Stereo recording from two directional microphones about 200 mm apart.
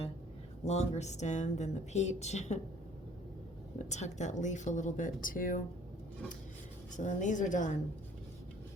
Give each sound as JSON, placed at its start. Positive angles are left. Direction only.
{"t": 0.6, "sound": "speech", "side_deg": 35}
{"t": 3.8, "sound": "speech", "side_deg": 35}
{"t": 6.9, "sound": "speech", "side_deg": 40}